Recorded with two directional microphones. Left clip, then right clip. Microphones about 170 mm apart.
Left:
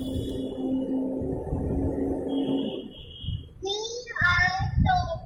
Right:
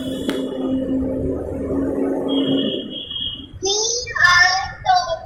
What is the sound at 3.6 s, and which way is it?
Child singing, centre (ahead or behind).